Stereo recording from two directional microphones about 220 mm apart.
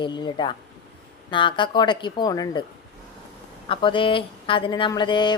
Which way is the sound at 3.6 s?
20° left (ahead or behind).